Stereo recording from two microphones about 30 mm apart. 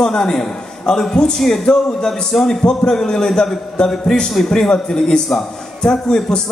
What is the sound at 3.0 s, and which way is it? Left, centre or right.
Speech, centre.